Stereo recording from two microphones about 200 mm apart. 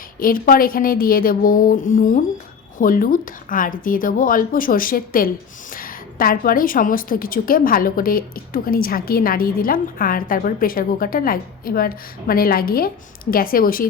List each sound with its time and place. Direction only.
0.2 s a woman's voice: 45° left (ahead or behind)